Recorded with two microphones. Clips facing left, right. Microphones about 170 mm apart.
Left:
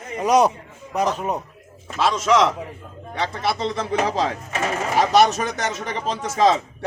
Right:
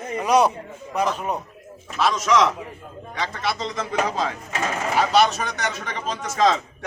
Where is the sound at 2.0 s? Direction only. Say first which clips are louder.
Left 1 dB; 25° left (ahead or behind).